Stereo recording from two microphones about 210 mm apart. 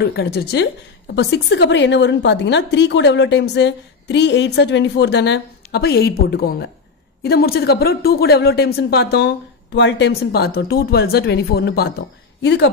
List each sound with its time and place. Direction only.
0.0 s a woman's voice: 50° left (ahead or behind)